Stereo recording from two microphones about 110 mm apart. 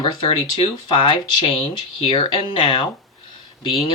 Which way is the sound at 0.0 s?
45° left (ahead or behind).